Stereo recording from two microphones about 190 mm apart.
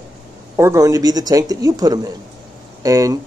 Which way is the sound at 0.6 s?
15° right (ahead or behind).